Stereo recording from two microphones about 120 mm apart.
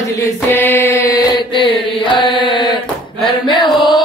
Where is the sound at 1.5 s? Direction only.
45° left (ahead or behind).